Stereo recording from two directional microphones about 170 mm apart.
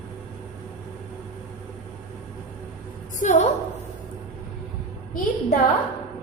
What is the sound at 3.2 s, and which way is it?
Speech, 45° left (ahead or behind).